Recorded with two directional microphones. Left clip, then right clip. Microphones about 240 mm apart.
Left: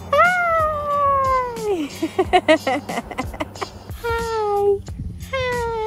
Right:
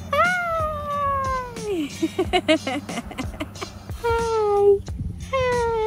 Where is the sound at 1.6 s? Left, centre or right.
Centre.